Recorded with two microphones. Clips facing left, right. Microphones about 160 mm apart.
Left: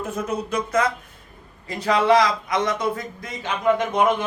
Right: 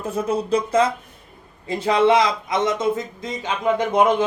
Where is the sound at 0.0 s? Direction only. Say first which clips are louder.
Right 4 dB; 30° right (ahead or behind).